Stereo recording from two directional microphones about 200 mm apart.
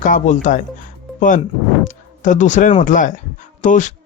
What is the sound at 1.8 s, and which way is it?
A man's voice, 40° left (ahead or behind).